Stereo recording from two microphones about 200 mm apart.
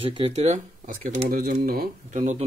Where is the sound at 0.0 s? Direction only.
30° right (ahead or behind).